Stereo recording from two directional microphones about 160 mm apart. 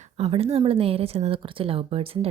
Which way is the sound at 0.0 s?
40° right (ahead or behind).